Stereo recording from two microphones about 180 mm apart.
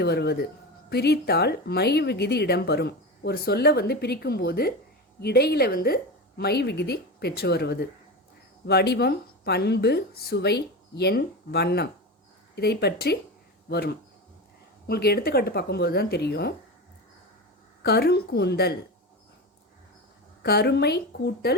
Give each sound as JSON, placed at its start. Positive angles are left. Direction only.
{"t": 0.0, "sound": "speech", "side_deg": 65}
{"t": 17.8, "sound": "speech", "side_deg": 65}
{"t": 20.4, "sound": "speech", "side_deg": 65}